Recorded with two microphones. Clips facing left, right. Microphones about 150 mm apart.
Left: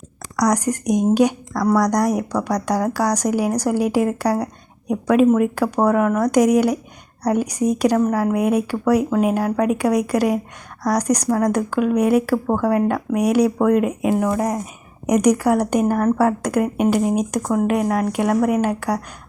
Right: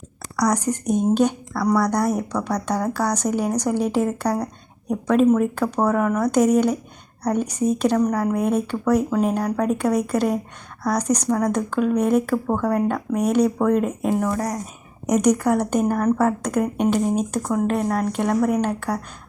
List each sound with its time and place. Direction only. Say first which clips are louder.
0.3 s speech: left 2 dB; 10° left (ahead or behind)